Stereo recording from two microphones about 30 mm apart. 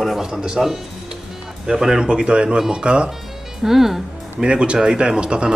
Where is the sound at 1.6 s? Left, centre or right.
Right.